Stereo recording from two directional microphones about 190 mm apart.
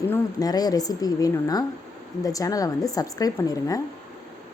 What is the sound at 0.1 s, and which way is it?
A woman's voice, 20° left (ahead or behind).